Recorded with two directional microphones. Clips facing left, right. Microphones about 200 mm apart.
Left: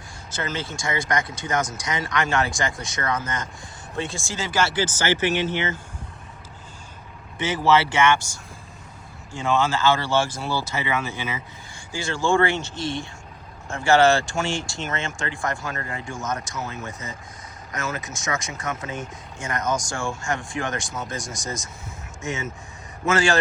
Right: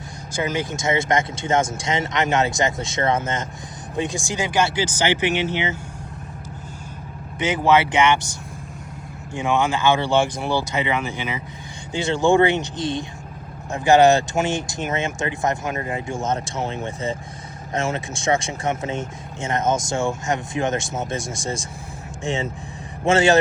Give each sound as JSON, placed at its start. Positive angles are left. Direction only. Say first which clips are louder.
{"t": 0.3, "sound": "speech", "louder": "right 6 dB", "side_deg": -15}
{"t": 7.3, "sound": "speech", "louder": "right 2 dB", "side_deg": -15}
{"t": 9.3, "sound": "speech", "louder": "right 2 dB", "side_deg": -15}